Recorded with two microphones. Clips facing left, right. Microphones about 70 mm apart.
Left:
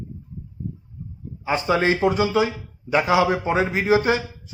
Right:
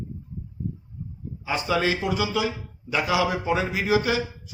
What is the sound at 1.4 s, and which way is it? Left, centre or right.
A man's voice, left.